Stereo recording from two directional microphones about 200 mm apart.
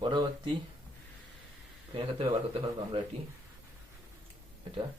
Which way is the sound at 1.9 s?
30° right (ahead or behind).